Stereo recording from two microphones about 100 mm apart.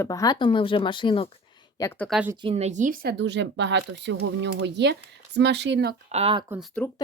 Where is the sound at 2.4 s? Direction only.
75° right (ahead or behind).